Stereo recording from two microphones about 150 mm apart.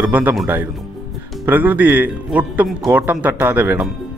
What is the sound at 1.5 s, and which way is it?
Speech, 10° right (ahead or behind).